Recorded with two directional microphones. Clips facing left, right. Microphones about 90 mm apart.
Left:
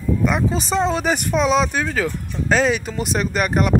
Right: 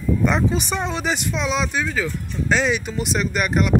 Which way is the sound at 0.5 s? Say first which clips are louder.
Left 4 dB; 30° left (ahead or behind).